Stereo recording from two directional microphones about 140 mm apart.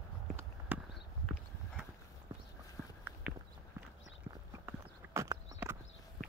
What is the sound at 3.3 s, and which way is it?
Walk, 5° right (ahead or behind).